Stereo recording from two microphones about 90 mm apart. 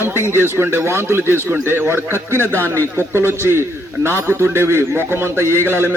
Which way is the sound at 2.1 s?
25° left (ahead or behind).